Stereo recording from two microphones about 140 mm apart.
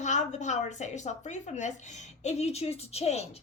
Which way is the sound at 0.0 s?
60° left (ahead or behind).